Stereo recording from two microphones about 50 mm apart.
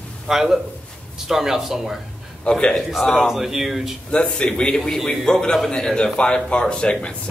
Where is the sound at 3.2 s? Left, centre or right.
Centre.